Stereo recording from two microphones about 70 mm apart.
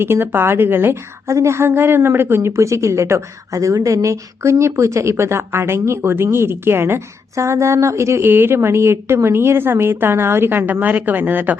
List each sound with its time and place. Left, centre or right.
0.0 s a woman's voice: right
1.3 s a woman's voice: right